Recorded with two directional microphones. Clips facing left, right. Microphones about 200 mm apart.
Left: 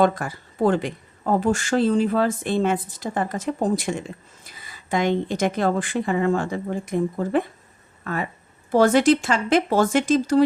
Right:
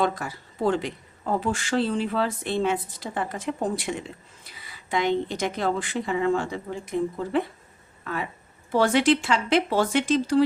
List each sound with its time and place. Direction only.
0.0 s speech: 50° left (ahead or behind)